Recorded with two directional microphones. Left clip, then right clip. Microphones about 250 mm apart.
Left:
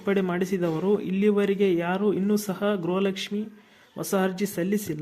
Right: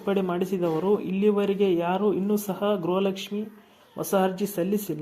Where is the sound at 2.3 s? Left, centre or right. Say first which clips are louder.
Even; left.